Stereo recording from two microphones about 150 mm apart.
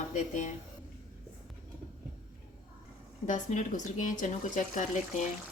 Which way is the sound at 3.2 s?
55° left (ahead or behind).